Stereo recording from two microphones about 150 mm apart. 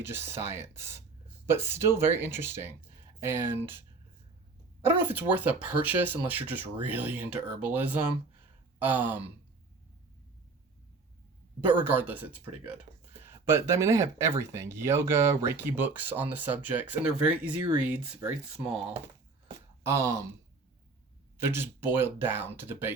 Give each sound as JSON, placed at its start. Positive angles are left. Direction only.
{"t": 0.0, "sound": "speech", "side_deg": -15}
{"t": 4.9, "sound": "speech", "side_deg": -15}
{"t": 11.6, "sound": "speech", "side_deg": -10}
{"t": 19.8, "sound": "speech", "side_deg": -20}
{"t": 21.4, "sound": "speech", "side_deg": -15}